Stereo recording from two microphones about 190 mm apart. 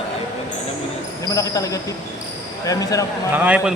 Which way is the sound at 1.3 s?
15° left (ahead or behind).